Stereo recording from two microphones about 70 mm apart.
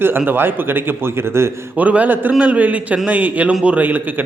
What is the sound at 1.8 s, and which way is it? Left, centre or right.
A man's voice, right.